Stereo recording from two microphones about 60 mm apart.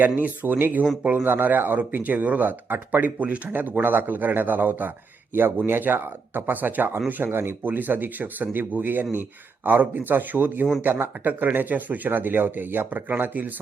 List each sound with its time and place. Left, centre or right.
0.0 s speech: right